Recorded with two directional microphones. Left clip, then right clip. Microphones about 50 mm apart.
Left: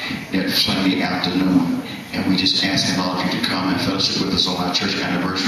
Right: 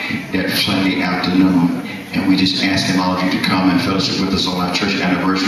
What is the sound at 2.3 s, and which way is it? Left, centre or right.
A man's voice, left.